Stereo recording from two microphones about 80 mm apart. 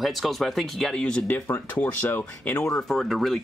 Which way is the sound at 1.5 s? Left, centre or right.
Left.